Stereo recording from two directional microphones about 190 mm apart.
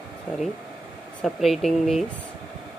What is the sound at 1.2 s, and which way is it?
Speech, centre (ahead or behind).